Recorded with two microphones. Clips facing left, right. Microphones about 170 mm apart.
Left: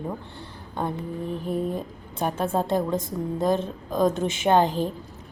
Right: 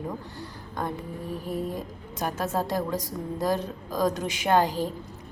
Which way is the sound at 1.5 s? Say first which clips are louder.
Left 4 dB; 25° left (ahead or behind).